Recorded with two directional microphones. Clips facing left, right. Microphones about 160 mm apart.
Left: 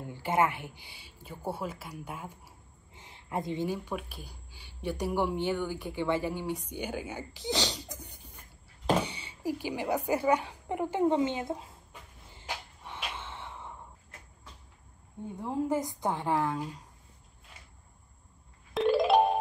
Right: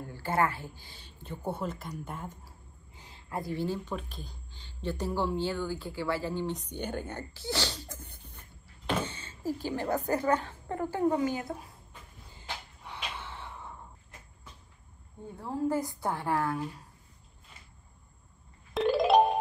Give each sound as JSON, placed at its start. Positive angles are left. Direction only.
{"t": 0.0, "sound": "speech", "side_deg": 15}
{"t": 2.9, "sound": "speech", "side_deg": 20}
{"t": 12.2, "sound": "a sound", "side_deg": 20}
{"t": 15.3, "sound": "speech", "side_deg": 20}
{"t": 18.7, "sound": "music", "side_deg": 0}